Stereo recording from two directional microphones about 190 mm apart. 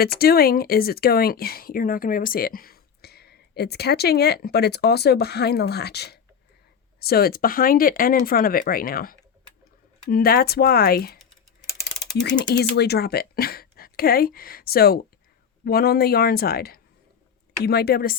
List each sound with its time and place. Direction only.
0.0 s speech: 55° left (ahead or behind)
12.3 s speech: 45° left (ahead or behind)